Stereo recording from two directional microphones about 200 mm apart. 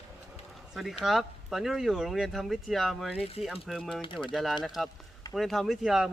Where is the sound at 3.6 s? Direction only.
Centre (ahead or behind).